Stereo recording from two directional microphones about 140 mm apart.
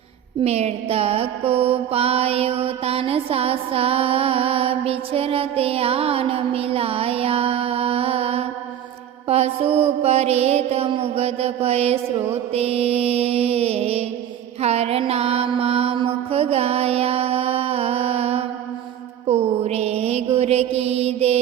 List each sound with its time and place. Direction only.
0.4 s mantra: 50° right (ahead or behind)